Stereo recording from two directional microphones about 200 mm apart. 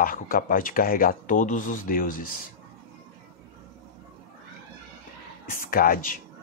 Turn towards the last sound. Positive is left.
turn(degrees=45)  # may be behind; listen again after turning